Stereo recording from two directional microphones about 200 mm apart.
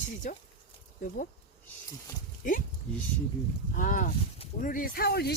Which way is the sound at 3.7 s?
40° left (ahead or behind).